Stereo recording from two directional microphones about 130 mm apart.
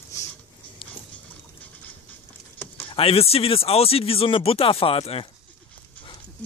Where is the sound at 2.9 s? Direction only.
50° left (ahead or behind).